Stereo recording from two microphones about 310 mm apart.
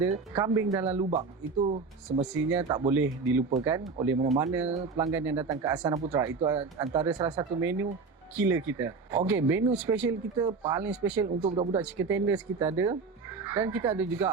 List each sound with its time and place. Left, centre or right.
0.3 s speech: centre
1.6 s speech: centre
2.2 s speech: centre
4.6 s speech: right
4.9 s speech: centre
11.4 s speech: centre
11.8 s speech: centre